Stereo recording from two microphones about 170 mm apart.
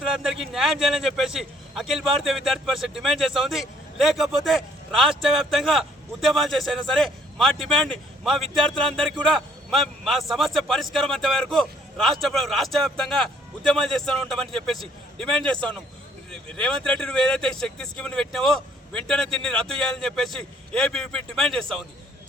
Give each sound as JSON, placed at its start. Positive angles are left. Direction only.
{"t": 0.0, "sound": "a man's voice", "side_deg": 0}